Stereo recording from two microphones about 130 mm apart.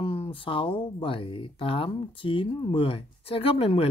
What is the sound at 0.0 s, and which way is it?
Speech, 45° left (ahead or behind).